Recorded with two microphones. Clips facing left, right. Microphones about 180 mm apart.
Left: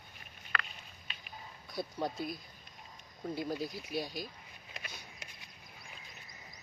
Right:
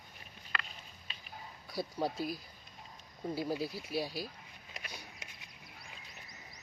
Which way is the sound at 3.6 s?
35° right (ahead or behind).